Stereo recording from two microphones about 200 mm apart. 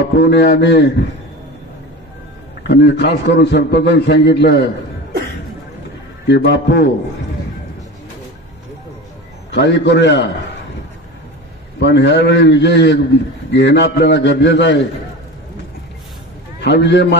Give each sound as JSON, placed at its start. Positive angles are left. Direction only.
{"t": 0.2, "sound": "a man's voice", "side_deg": 60}
{"t": 2.6, "sound": "a man's voice", "side_deg": 60}
{"t": 6.2, "sound": "a man's voice", "side_deg": 60}
{"t": 9.5, "sound": "a man's voice", "side_deg": 60}
{"t": 11.8, "sound": "a man's voice", "side_deg": 60}
{"t": 16.5, "sound": "a man's voice", "side_deg": 60}